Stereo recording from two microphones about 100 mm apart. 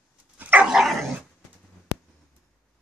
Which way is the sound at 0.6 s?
5° right (ahead or behind).